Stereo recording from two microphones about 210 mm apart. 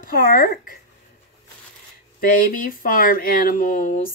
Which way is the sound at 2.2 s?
45° left (ahead or behind).